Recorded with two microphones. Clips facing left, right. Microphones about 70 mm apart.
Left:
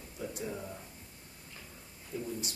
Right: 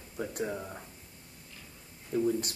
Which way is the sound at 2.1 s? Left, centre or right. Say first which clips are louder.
Right 10 dB; right.